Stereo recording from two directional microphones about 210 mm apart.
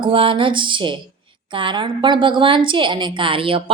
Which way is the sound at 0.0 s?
25° right (ahead or behind).